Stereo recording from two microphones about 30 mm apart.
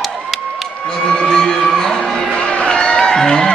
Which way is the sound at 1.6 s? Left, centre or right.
Centre.